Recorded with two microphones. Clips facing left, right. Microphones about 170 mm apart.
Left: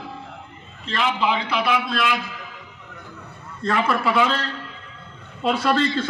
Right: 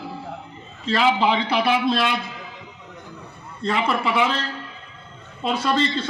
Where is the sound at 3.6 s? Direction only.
20° right (ahead or behind).